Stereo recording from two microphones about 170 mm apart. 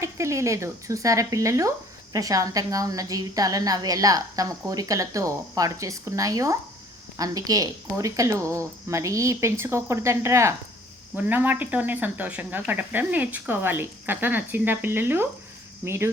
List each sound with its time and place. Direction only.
0.0 s a woman's voice: 15° right (ahead or behind)